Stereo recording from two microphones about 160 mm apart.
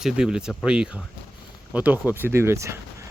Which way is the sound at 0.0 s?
5° right (ahead or behind).